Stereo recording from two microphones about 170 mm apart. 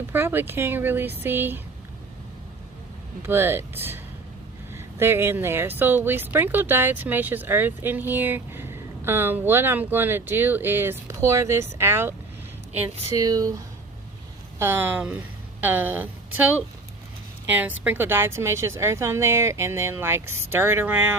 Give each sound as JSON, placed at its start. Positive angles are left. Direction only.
{"t": 0.1, "sound": "speech", "side_deg": -15}
{"t": 3.2, "sound": "speech", "side_deg": -15}
{"t": 14.6, "sound": "speech", "side_deg": -15}